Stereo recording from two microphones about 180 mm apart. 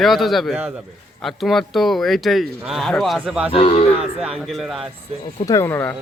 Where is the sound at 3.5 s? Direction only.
30° left (ahead or behind).